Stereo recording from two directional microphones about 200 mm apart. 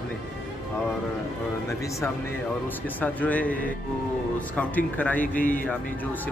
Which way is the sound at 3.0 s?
5° left (ahead or behind).